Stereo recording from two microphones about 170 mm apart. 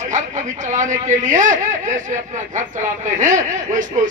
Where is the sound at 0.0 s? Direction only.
45° right (ahead or behind).